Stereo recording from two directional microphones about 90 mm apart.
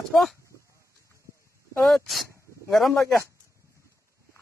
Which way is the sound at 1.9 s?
Centre (ahead or behind).